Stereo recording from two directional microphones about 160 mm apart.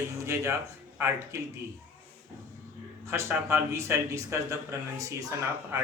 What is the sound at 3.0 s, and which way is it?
Speech, 15° right (ahead or behind).